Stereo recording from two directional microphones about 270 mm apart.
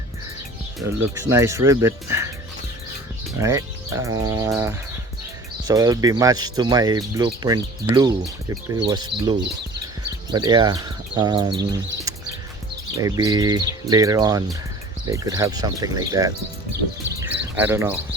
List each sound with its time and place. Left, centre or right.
1.2 s speech: centre
3.3 s speech: centre
17.2 s bird: centre